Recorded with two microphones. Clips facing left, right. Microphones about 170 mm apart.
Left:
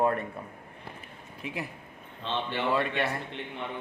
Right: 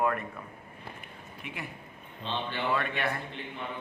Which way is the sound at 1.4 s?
35° left (ahead or behind).